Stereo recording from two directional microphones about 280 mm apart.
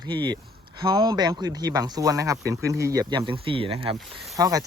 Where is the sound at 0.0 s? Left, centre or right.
Centre.